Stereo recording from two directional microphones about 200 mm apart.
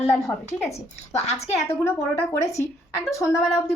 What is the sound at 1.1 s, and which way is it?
Speech, 30° left (ahead or behind).